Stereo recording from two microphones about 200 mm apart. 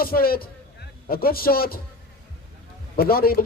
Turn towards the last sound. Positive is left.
turn(degrees=50)  # may be behind; listen again after turning